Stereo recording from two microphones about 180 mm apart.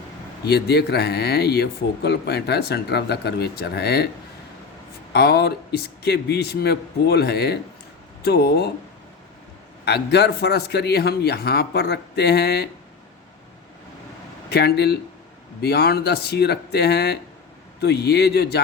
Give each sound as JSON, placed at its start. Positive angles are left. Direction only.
{"t": 0.4, "sound": "speech", "side_deg": 65}
{"t": 5.1, "sound": "speech", "side_deg": 65}
{"t": 9.8, "sound": "speech", "side_deg": 70}
{"t": 14.5, "sound": "speech", "side_deg": 65}